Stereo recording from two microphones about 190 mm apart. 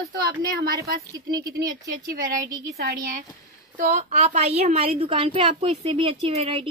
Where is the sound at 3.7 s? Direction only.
40° right (ahead or behind).